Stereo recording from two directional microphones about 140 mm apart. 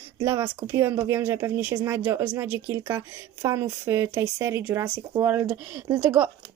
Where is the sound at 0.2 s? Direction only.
20° right (ahead or behind).